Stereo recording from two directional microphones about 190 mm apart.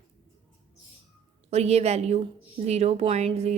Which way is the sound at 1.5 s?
35° right (ahead or behind).